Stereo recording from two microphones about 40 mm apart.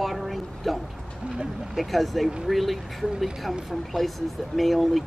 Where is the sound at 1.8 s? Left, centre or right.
Centre.